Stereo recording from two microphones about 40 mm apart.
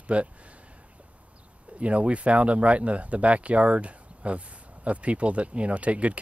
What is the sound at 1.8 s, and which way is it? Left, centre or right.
Speech, right.